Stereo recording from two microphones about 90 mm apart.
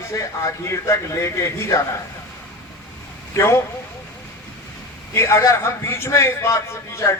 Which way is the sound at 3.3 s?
30° left (ahead or behind).